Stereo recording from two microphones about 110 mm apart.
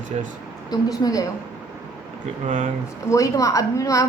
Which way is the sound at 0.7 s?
35° left (ahead or behind).